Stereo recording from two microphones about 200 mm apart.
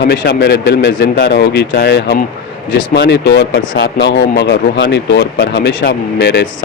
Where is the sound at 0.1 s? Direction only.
55° left (ahead or behind).